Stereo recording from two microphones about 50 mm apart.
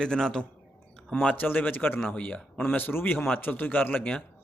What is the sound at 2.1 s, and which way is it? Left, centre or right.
Speech, left.